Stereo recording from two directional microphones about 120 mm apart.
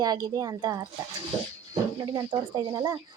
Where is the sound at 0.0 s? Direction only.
35° right (ahead or behind).